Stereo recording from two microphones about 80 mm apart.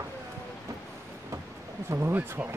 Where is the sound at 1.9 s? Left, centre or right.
Right.